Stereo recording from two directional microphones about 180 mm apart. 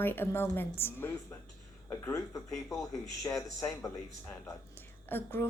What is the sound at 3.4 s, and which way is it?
A woman's voice, 15° left (ahead or behind).